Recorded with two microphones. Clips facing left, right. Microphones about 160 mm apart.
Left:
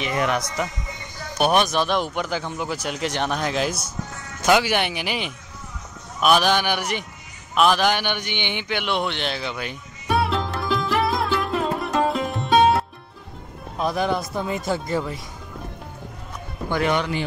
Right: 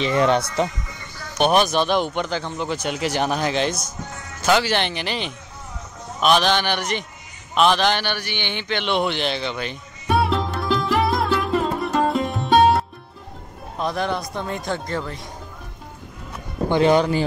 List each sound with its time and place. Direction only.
0.0 s speech: 30° right (ahead or behind)
1.4 s a man's voice: centre (ahead or behind)
7.5 s a sound: 5° left (ahead or behind)
13.7 s a man's voice: centre (ahead or behind)
16.6 s speech: 25° right (ahead or behind)